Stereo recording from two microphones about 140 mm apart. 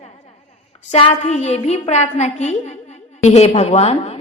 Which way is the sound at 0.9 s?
50° left (ahead or behind).